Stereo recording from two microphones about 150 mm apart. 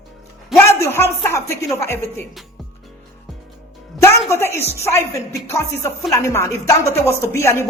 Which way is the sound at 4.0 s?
15° left (ahead or behind).